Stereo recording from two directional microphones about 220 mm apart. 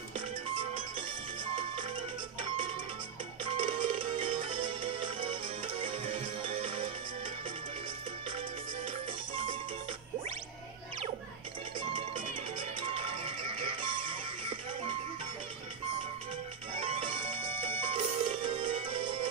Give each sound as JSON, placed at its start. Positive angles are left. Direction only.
{"t": 3.4, "sound": "music", "side_deg": -25}
{"t": 12.5, "sound": "music", "side_deg": -25}
{"t": 16.8, "sound": "music", "side_deg": -25}